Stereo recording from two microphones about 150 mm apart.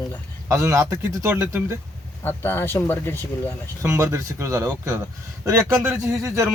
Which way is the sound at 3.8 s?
20° right (ahead or behind).